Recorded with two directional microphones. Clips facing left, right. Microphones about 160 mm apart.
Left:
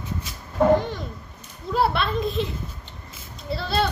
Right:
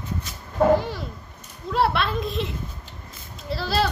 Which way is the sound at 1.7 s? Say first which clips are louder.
Even; centre (ahead or behind).